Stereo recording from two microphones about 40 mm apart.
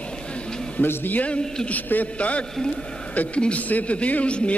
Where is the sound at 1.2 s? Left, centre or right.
Left.